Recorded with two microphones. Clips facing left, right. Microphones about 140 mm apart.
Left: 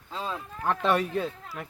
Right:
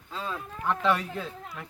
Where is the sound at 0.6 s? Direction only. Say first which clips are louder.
Left 1 dB; 55° left (ahead or behind).